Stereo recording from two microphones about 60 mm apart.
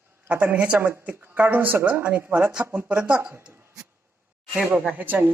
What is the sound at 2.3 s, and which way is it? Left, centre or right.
Speech, centre.